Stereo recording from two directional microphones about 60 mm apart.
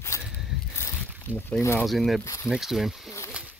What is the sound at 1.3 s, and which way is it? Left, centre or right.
Speech, right.